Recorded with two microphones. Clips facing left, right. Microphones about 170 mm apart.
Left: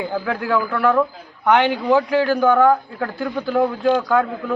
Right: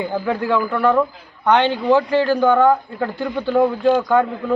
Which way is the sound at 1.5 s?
10° left (ahead or behind).